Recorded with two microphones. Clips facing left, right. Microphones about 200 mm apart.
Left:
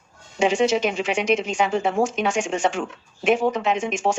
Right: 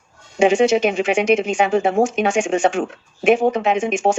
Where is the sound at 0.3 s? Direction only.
55° right (ahead or behind).